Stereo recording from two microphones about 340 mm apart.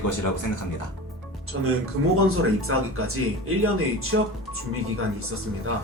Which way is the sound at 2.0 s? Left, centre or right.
Right.